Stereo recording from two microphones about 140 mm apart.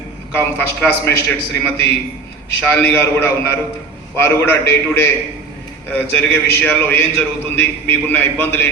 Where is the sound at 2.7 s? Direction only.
15° left (ahead or behind).